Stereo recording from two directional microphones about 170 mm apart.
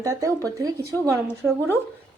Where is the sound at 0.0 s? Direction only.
20° right (ahead or behind).